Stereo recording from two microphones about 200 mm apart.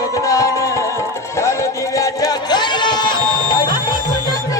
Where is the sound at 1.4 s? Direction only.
15° left (ahead or behind).